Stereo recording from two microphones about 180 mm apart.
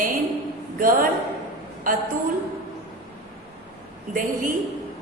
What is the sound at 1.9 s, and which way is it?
Speech, 50° right (ahead or behind).